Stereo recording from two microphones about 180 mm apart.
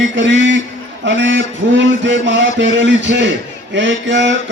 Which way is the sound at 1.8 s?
90° right.